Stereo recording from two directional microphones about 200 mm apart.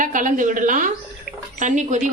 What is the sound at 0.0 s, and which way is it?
A woman's voice, 40° right (ahead or behind).